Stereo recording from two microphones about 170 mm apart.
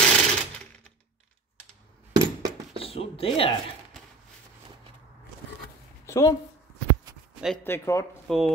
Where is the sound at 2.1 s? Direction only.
25° right (ahead or behind).